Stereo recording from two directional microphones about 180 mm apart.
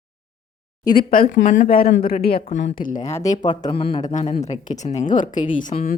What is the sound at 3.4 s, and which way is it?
Speech, 25° left (ahead or behind).